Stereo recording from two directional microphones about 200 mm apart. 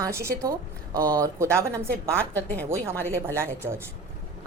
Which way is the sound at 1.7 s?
5° left (ahead or behind).